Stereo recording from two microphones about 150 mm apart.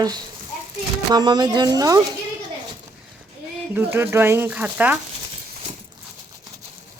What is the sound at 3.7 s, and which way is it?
Speech, 15° right (ahead or behind).